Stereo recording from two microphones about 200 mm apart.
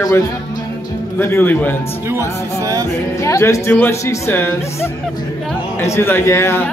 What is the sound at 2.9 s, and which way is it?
A man's voice, 15° left (ahead or behind).